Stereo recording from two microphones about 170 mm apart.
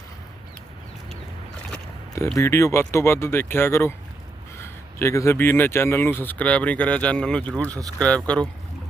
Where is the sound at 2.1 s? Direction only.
15° left (ahead or behind).